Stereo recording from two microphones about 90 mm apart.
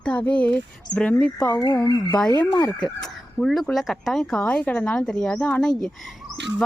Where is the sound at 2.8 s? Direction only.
5° left (ahead or behind).